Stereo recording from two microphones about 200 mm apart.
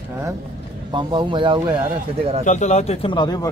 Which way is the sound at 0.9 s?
25° right (ahead or behind).